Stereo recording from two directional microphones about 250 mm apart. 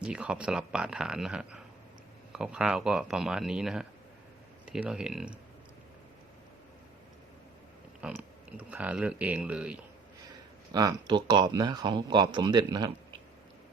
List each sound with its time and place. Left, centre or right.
0.0 s speech: centre
8.0 s speech: centre
10.7 s speech: centre